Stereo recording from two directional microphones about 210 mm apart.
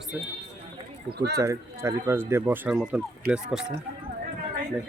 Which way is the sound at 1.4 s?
15° right (ahead or behind).